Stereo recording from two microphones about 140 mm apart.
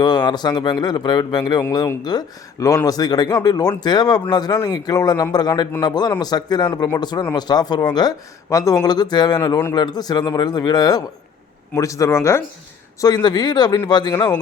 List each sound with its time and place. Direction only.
0.0 s speech: 30° left (ahead or behind)
13.0 s speech: 30° left (ahead or behind)